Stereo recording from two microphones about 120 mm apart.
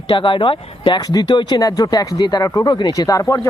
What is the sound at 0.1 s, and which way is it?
Speech, 40° left (ahead or behind).